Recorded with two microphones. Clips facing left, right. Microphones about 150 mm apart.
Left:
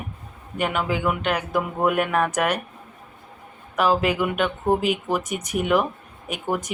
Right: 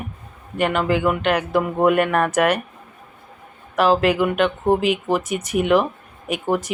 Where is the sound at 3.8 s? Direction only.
Centre (ahead or behind).